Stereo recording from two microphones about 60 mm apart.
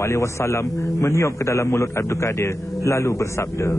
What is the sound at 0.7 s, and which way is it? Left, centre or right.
A man's voice, left.